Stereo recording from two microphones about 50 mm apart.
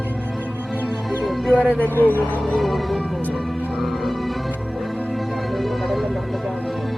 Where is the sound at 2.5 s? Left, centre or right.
Centre.